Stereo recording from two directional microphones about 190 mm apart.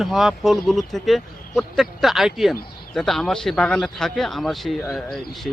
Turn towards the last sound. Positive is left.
turn(degrees=0)  # may be behind; listen again after turning